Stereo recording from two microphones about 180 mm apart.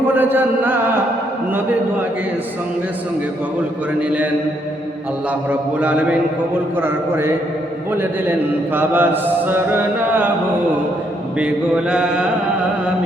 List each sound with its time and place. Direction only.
0.1 s mantra: 10° right (ahead or behind)
5.3 s mantra: 10° right (ahead or behind)
11.3 s mantra: 5° right (ahead or behind)